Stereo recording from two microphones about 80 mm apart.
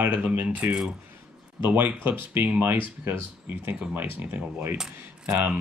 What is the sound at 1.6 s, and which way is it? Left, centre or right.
Speech, right.